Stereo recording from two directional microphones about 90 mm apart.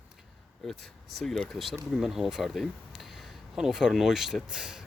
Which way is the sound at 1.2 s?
5° left (ahead or behind).